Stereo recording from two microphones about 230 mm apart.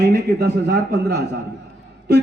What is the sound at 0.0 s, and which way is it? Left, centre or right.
A man's voice, right.